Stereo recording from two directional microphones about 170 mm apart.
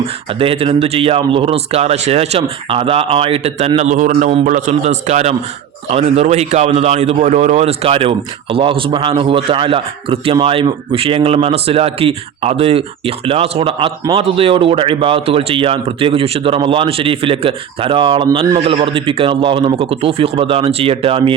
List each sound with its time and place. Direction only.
0.0 s a man's voice: 35° right (ahead or behind)